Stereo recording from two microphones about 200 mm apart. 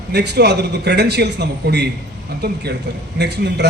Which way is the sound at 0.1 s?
55° right (ahead or behind).